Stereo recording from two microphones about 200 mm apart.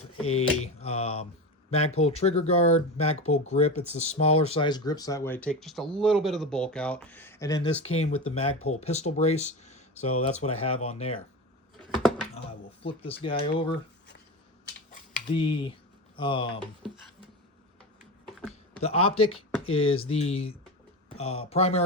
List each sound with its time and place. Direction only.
0.2 s speech: 90° left
0.6 s speech: 30° left (ahead or behind)
12.3 s a sound: 30° left (ahead or behind)
13.4 s speech: 25° left (ahead or behind)
15.3 s speech: 25° left (ahead or behind)
18.8 s speech: 30° left (ahead or behind)